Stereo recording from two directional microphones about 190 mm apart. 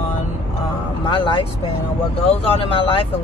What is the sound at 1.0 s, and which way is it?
Speech, 25° left (ahead or behind).